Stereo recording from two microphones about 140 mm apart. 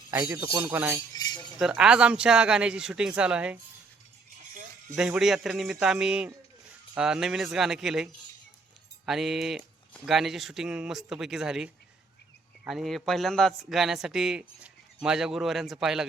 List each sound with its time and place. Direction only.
0.1 s speech: 15° right (ahead or behind)
1.1 s cutlery: 25° left (ahead or behind)
1.5 s speech: 5° right (ahead or behind)
4.9 s a man's voice: 5° right (ahead or behind)